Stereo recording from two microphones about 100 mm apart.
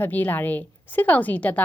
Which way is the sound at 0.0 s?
20° left (ahead or behind).